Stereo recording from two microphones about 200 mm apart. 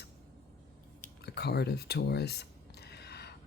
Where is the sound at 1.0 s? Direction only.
55° left (ahead or behind).